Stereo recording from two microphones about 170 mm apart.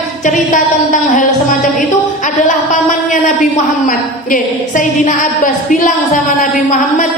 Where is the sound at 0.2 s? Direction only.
50° left (ahead or behind).